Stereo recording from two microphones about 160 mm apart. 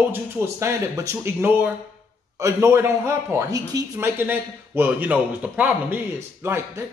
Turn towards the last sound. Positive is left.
turn(degrees=-15)  # may be behind; listen again after turning